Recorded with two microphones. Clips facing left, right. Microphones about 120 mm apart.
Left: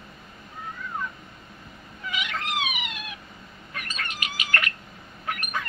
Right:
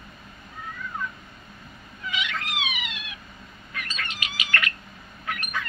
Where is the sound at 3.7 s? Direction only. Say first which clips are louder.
Even; 45° left (ahead or behind).